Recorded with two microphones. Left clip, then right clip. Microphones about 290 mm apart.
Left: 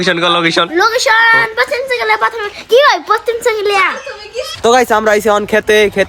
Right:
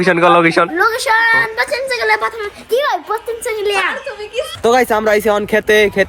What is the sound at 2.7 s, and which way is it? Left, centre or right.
Speech, centre.